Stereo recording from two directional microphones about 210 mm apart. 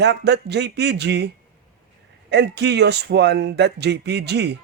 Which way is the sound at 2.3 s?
55° right (ahead or behind).